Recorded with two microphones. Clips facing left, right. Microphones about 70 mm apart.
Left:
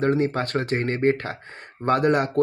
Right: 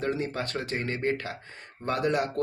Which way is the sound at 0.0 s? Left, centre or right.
Left.